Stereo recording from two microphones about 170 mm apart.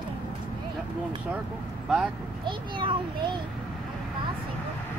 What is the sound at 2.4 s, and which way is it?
Speech, 30° right (ahead or behind).